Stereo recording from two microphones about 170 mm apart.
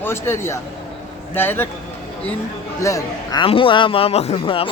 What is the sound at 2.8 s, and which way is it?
A man's voice, 20° left (ahead or behind).